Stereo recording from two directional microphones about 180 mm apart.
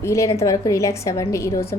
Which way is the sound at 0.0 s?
15° left (ahead or behind).